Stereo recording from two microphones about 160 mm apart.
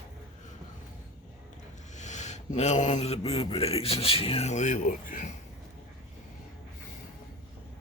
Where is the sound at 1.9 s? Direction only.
45° left (ahead or behind).